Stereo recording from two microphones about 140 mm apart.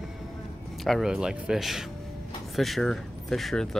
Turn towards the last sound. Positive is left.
turn(degrees=0)  # may be behind; listen again after turning